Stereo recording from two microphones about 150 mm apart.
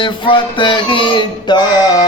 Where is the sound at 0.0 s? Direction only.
35° left (ahead or behind).